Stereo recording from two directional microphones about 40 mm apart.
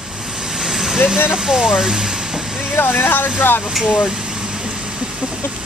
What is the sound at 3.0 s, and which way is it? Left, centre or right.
Speech, left.